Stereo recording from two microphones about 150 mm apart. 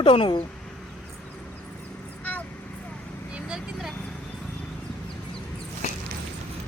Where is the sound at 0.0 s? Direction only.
35° left (ahead or behind).